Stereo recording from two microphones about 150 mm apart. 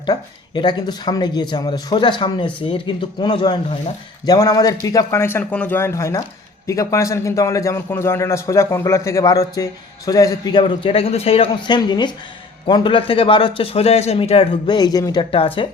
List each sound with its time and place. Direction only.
0.0 s a man's voice: 30° left (ahead or behind)